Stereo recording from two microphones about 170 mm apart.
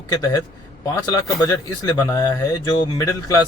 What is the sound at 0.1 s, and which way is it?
Speech, 20° left (ahead or behind).